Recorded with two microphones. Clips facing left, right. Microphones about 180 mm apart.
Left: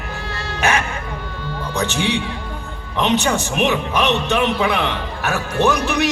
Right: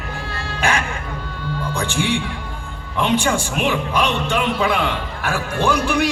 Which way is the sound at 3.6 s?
20° left (ahead or behind).